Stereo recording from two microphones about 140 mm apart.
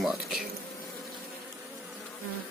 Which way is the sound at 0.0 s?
Centre (ahead or behind).